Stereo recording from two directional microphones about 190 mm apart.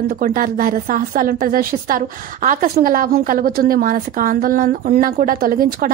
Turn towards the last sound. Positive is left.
turn(degrees=-50)  # may be behind; listen again after turning